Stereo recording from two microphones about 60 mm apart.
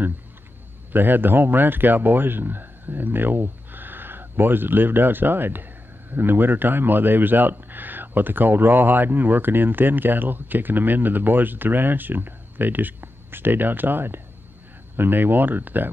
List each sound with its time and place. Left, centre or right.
0.9 s speech: right